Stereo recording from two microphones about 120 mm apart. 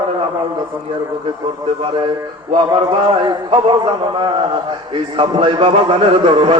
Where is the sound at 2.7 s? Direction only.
40° right (ahead or behind).